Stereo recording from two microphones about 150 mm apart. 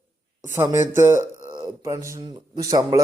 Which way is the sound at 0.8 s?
15° right (ahead or behind).